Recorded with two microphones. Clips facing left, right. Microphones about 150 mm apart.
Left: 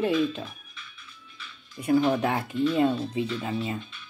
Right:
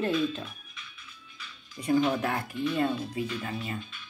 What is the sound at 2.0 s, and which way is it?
Speech, 25° left (ahead or behind).